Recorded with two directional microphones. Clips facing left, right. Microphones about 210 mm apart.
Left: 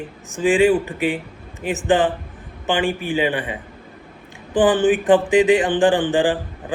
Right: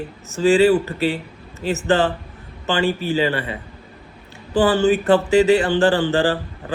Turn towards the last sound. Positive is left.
turn(degrees=15)  # may be behind; listen again after turning